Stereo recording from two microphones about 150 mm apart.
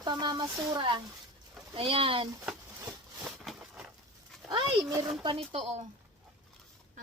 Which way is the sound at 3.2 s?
5° right (ahead or behind).